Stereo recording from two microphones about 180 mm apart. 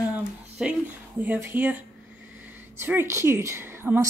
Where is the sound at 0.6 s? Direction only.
10° right (ahead or behind).